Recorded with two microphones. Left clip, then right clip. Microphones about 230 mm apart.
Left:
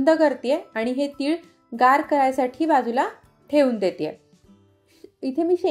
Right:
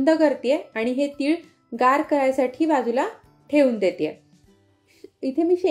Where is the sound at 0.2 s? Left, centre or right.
Centre.